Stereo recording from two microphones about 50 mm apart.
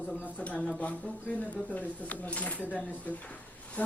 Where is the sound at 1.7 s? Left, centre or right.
Left.